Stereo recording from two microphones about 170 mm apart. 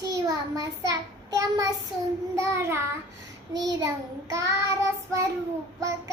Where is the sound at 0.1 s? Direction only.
20° right (ahead or behind).